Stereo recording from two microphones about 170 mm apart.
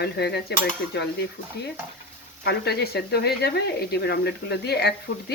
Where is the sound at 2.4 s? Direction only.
75° left (ahead or behind).